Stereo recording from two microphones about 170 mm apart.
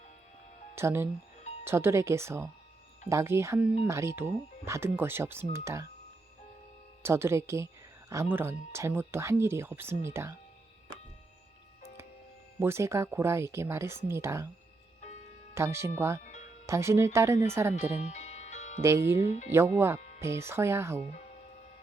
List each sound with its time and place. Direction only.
0.8 s speech: 15° right (ahead or behind)
7.0 s speech: 15° right (ahead or behind)
12.5 s speech: 15° right (ahead or behind)
15.5 s speech: 15° right (ahead or behind)
16.2 s music: 45° left (ahead or behind)
16.6 s speech: 15° right (ahead or behind)
18.1 s music: 40° left (ahead or behind)
18.8 s speech: 15° right (ahead or behind)
21.1 s music: 45° left (ahead or behind)